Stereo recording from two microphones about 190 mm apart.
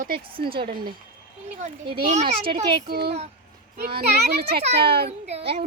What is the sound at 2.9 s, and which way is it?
Speech, 60° right (ahead or behind).